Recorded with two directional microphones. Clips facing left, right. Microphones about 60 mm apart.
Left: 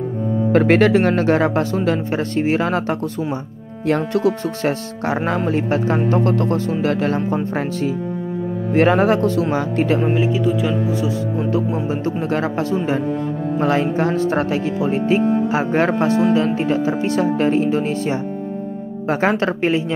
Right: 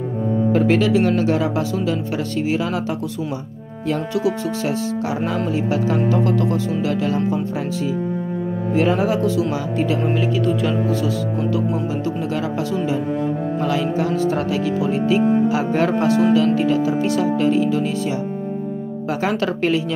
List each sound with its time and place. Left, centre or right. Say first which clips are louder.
0.5 s speech: left 4 dB; left
10.0 s speech: left 2 dB; centre
11.9 s speech: left 2 dB; left